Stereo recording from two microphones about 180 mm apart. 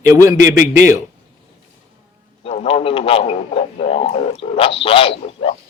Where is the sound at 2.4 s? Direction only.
35° left (ahead or behind).